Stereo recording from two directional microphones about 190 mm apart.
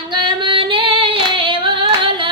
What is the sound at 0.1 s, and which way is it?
Singing, 25° right (ahead or behind).